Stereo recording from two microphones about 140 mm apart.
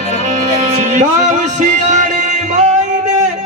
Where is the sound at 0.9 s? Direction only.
60° right (ahead or behind).